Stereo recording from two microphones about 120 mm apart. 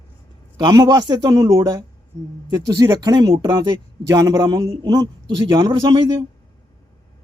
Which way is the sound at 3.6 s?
30° right (ahead or behind).